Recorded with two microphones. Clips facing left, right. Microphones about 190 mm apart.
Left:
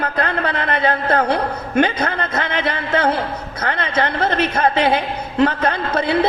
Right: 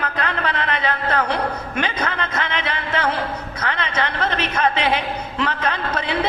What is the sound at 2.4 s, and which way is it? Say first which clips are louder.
A man's voice: left 4 dB; 40° left (ahead or behind).